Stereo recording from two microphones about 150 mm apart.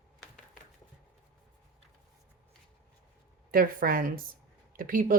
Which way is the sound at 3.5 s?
75° right (ahead or behind).